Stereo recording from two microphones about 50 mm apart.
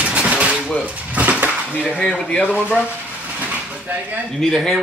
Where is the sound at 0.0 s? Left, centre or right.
Right.